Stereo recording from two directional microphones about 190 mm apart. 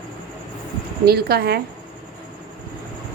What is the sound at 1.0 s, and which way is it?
Speech, 55° right (ahead or behind).